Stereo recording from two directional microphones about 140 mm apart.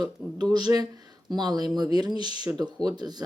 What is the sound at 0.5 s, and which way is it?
Speech, 30° right (ahead or behind).